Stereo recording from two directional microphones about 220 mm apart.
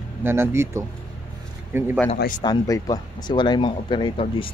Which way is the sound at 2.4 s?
15° left (ahead or behind).